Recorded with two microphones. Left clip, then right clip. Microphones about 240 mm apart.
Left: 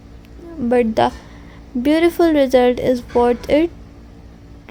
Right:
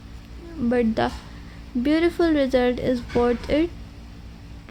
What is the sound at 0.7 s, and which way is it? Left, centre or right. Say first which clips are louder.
A woman's voice: left 7 dB; left.